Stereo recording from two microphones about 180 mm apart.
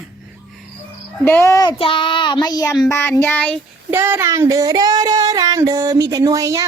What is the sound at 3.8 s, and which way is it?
Child singing, 10° right (ahead or behind).